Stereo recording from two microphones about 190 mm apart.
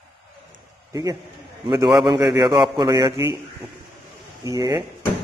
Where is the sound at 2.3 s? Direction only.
20° right (ahead or behind).